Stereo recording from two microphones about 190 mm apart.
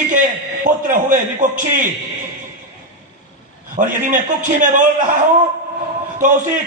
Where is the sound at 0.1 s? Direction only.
45° right (ahead or behind).